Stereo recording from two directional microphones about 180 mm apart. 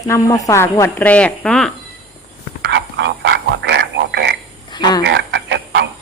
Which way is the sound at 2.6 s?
75° right (ahead or behind).